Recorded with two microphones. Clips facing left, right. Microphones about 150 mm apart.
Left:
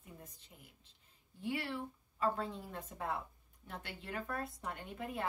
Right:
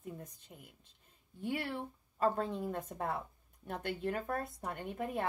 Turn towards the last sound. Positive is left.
turn(degrees=-50)  # may be behind; listen again after turning